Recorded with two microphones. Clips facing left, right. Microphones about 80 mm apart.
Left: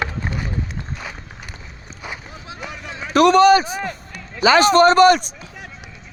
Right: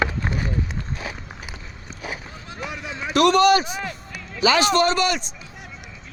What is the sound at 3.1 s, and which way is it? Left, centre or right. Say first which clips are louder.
A man's voice: left 4 dB; left.